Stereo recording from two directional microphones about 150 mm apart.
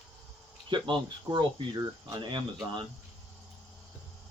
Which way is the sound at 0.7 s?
30° right (ahead or behind).